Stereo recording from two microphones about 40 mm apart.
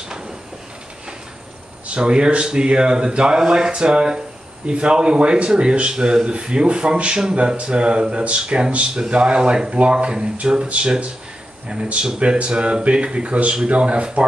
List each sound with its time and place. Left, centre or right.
2.0 s speech: right